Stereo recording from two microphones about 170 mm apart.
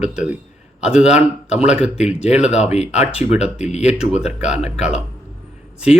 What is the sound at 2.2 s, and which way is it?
Speech, 40° left (ahead or behind).